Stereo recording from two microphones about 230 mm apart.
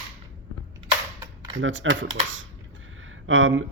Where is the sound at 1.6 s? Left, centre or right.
Right.